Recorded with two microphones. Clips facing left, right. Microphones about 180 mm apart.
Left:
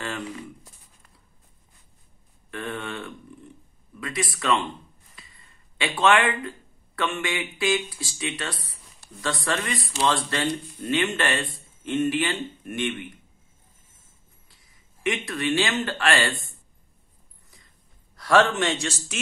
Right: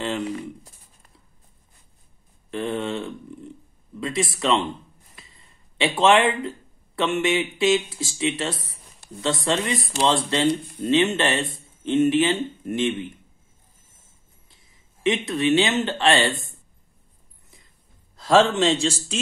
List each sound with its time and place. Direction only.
2.5 s speech: 25° right (ahead or behind)
5.1 s a sound: 25° right (ahead or behind)
7.0 s speech: 25° right (ahead or behind)
14.6 s speech: 25° right (ahead or behind)
18.1 s speech: 25° right (ahead or behind)